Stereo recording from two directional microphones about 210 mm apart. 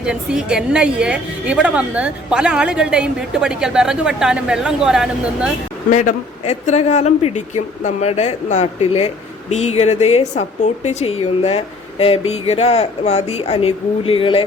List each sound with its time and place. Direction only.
0.0 s a woman's voice: 5° right (ahead or behind)
5.9 s a man's voice: 35° left (ahead or behind)